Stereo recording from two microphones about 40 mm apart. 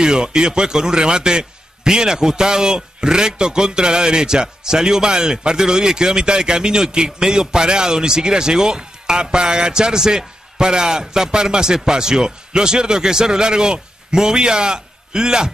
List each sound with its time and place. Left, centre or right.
0.0 s a man's voice: centre